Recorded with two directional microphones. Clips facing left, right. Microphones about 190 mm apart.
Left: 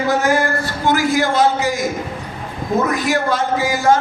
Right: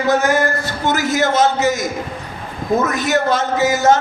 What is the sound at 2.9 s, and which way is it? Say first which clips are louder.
A man's voice: right 1 dB; 20° right (ahead or behind).